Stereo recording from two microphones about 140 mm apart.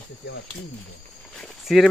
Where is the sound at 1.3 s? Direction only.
Centre (ahead or behind).